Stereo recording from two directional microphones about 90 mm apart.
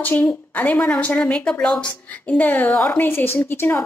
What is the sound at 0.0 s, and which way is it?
A woman's voice, 20° left (ahead or behind).